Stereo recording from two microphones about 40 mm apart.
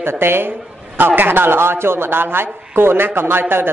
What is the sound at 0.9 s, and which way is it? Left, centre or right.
A woman's voice, right.